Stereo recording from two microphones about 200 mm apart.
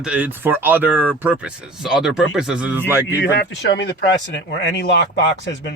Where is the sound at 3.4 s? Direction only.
60° left (ahead or behind).